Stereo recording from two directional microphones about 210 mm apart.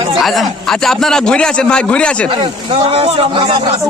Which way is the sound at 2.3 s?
25° right (ahead or behind).